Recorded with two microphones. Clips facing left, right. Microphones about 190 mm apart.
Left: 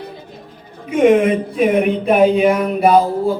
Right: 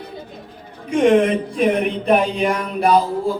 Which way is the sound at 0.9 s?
5° left (ahead or behind).